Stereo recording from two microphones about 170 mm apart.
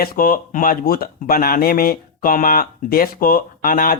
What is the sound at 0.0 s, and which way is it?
Speech, 60° left (ahead or behind).